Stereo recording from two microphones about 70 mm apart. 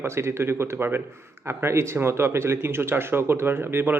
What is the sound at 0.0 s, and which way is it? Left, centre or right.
Speech, right.